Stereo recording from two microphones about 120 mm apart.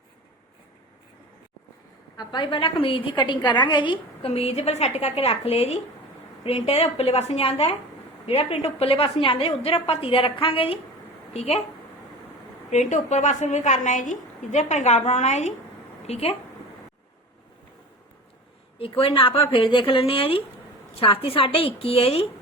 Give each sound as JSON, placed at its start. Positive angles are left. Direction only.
{"t": 2.1, "sound": "a woman's voice", "side_deg": 40}
{"t": 4.3, "sound": "a woman's voice", "side_deg": 60}
{"t": 11.3, "sound": "a woman's voice", "side_deg": 60}
{"t": 12.7, "sound": "a woman's voice", "side_deg": 85}
{"t": 16.0, "sound": "a woman's voice", "side_deg": 60}
{"t": 18.8, "sound": "a woman's voice", "side_deg": 50}